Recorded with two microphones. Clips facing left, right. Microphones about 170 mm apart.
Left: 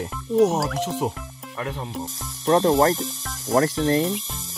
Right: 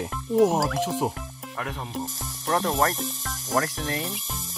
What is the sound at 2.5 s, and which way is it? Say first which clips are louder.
Speech: left 7 dB; 30° left (ahead or behind).